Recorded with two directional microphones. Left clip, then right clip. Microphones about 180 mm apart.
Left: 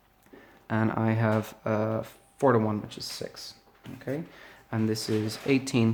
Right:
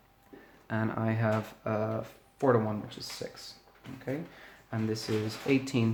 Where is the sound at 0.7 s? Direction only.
40° left (ahead or behind).